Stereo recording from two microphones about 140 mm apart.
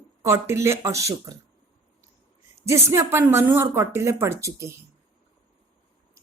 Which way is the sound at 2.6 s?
20° right (ahead or behind).